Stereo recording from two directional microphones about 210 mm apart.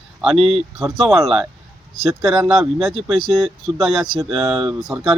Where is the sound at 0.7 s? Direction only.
Centre (ahead or behind).